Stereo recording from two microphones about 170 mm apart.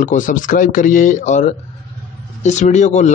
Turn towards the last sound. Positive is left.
turn(degrees=45)  # may be behind; listen again after turning